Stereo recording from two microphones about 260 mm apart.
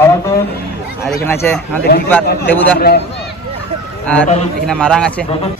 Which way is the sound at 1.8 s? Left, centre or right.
Left.